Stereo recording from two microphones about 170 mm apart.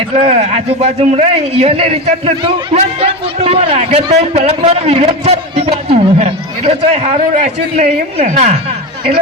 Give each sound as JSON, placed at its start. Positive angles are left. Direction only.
{"t": 0.2, "sound": "a man's voice", "side_deg": -40}